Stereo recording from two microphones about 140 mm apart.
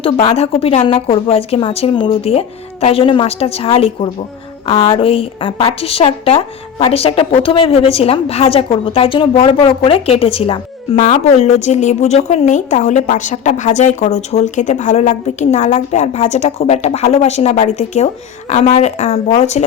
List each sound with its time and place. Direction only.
0.0 s a woman's voice: 40° left (ahead or behind)